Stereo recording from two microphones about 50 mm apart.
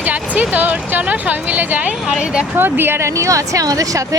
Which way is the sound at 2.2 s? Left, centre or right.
Centre.